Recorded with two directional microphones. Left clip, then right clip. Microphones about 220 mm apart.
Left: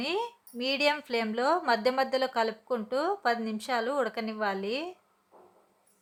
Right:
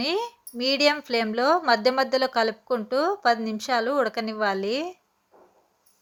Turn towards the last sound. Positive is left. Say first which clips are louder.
# right 6 dB
turn(degrees=-20)  # may be behind; listen again after turning